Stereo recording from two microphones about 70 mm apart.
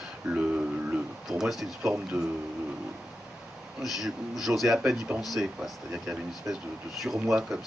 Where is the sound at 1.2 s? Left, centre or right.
Centre.